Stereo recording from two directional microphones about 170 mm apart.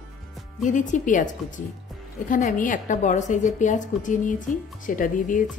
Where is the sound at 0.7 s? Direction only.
50° left (ahead or behind).